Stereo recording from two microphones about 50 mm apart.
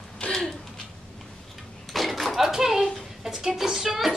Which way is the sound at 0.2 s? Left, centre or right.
Centre.